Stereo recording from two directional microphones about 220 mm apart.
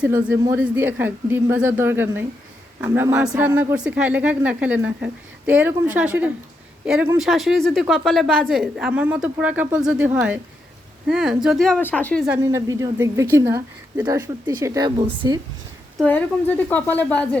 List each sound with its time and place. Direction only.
0.0 s speech: 5° right (ahead or behind)
12.3 s a woman's voice: 15° right (ahead or behind)
16.0 s speech: 5° left (ahead or behind)